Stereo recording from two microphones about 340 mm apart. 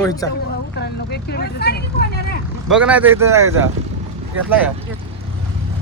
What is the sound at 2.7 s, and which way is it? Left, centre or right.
Speech, centre.